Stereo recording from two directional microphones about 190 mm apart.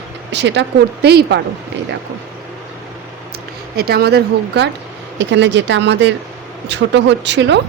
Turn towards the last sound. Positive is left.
turn(degrees=-70)  # may be behind; listen again after turning